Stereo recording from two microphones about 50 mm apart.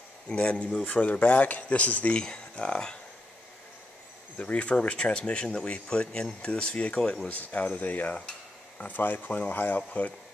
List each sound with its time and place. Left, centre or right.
0.3 s speech: left
2.1 s speech: centre
4.4 s speech: left